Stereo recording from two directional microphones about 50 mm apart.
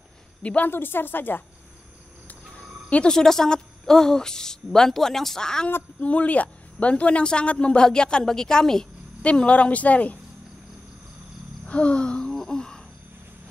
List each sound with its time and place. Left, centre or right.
0.4 s a woman's voice: left
0.7 s speech: left
3.1 s a woman's voice: centre
5.9 s a woman's voice: left; by 8.8 s centre
9.2 s a woman's voice: left
11.6 s gasp: left
12.3 s wail: centre